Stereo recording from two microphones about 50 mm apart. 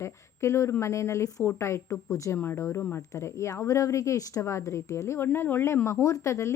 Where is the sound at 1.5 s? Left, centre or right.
Left.